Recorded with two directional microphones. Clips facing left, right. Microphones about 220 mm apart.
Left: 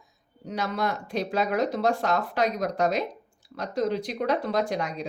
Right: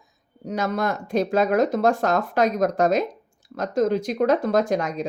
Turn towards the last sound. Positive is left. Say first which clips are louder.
# right 5 dB
turn(degrees=-45)  # may be behind; listen again after turning